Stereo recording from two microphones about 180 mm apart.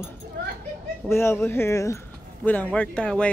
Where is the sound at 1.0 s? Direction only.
15° left (ahead or behind).